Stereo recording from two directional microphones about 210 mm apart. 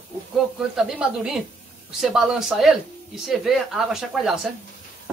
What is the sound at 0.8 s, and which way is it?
Speech, centre (ahead or behind).